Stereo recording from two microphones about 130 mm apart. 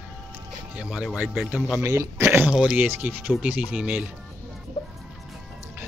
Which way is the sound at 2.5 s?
5° right (ahead or behind).